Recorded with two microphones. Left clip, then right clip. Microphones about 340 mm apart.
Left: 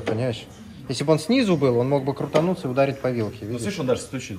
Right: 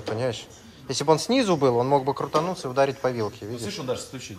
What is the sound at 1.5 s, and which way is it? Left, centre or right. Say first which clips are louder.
Speech: right 1 dB; centre.